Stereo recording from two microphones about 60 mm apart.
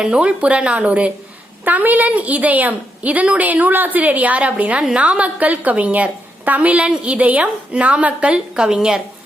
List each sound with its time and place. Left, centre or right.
0.0 s a woman's voice: centre